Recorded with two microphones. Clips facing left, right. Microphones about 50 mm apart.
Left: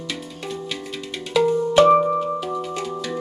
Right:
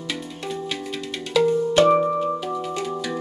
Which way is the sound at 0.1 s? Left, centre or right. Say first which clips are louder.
Right 2 dB; centre.